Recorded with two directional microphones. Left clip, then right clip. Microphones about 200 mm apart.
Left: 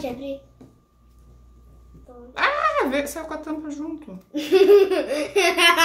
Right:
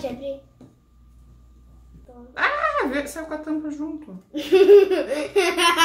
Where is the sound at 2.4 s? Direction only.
50° left (ahead or behind).